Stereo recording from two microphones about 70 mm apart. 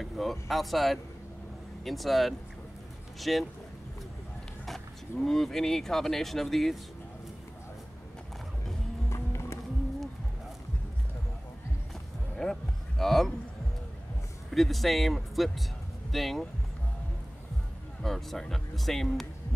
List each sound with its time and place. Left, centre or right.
0.0 s speech: centre
5.2 s speech: centre
9.1 s music: left
12.4 s a sound: centre
14.5 s speech: centre
18.0 s speech: centre